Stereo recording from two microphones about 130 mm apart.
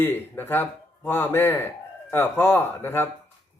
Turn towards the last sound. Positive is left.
turn(degrees=15)  # may be behind; listen again after turning